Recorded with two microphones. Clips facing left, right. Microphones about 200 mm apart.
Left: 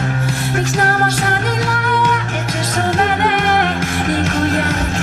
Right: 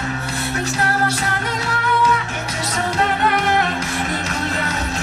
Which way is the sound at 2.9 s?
50° left (ahead or behind).